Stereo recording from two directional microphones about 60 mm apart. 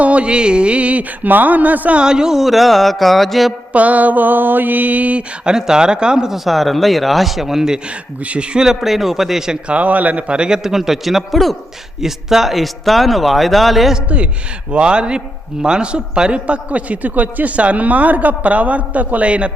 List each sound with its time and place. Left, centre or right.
0.0 s a man's voice: right
2.0 s speech: centre
3.7 s a man's voice: right
5.5 s speech: centre
8.2 s a man's voice: centre
9.6 s a man's voice: right; by 13.9 s centre
13.9 s a man's voice: centre